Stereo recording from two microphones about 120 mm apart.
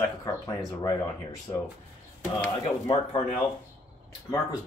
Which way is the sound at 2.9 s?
45° left (ahead or behind).